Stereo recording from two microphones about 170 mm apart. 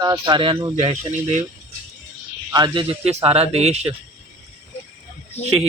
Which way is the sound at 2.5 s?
25° right (ahead or behind).